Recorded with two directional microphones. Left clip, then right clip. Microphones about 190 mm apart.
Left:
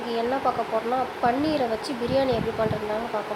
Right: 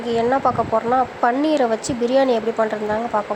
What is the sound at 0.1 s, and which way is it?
Speech, 35° right (ahead or behind).